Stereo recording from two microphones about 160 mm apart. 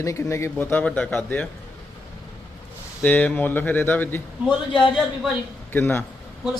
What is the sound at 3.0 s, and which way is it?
Speech, 10° left (ahead or behind).